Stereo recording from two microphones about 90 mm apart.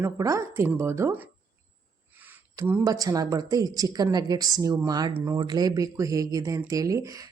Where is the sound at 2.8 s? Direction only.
40° right (ahead or behind).